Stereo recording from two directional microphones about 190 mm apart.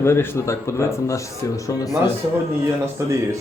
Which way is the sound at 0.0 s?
15° left (ahead or behind).